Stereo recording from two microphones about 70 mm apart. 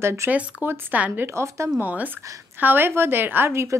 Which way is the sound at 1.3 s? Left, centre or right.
Right.